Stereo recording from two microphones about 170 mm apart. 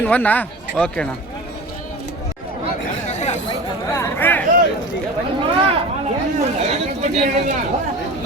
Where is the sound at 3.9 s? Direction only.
15° left (ahead or behind).